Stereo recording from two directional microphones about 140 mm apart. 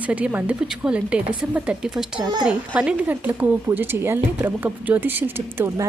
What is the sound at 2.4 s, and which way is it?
A woman's voice, 5° right (ahead or behind).